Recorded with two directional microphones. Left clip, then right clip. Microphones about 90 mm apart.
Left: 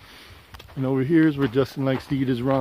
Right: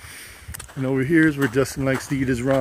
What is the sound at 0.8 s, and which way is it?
Speech, 35° left (ahead or behind).